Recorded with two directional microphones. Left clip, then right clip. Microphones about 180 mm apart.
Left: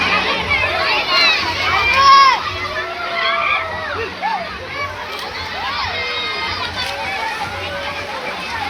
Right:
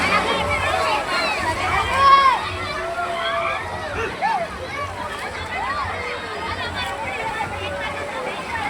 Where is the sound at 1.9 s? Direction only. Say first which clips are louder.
Left 4 dB; 25° right (ahead or behind).